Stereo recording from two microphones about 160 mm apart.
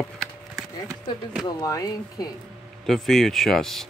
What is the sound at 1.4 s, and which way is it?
Speech, 25° left (ahead or behind).